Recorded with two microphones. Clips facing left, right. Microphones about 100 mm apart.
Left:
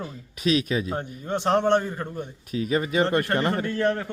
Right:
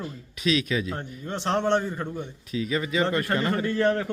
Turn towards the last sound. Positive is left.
turn(degrees=0)  # may be behind; listen again after turning